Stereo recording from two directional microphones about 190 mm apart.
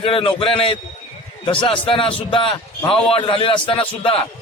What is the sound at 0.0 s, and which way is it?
A man's voice, 30° left (ahead or behind).